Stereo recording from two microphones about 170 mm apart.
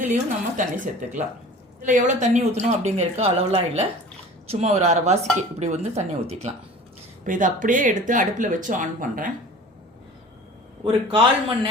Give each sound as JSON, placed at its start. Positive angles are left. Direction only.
{"t": 0.1, "sound": "speech", "side_deg": -50}
{"t": 10.8, "sound": "a man's voice", "side_deg": -30}